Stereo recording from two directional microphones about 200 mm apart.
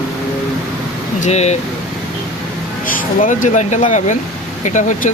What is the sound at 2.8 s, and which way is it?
Speech, 40° left (ahead or behind).